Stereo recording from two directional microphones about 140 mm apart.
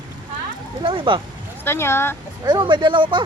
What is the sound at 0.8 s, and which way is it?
Speech, 35° right (ahead or behind).